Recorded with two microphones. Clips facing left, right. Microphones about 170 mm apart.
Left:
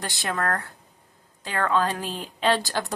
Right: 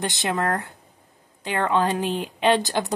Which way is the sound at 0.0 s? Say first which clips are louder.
Right 4 dB; 20° right (ahead or behind).